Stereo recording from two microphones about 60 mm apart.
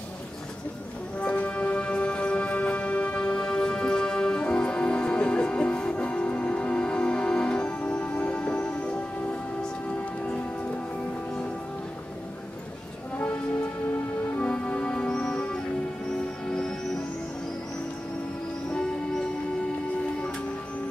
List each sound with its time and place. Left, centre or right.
1.2 s music: left
14.3 s music: left
18.7 s music: centre